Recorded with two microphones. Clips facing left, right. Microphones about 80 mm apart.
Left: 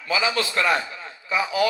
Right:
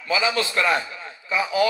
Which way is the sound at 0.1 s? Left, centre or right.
Right.